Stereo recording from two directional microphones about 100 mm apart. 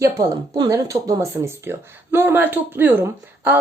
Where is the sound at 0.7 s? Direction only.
35° right (ahead or behind).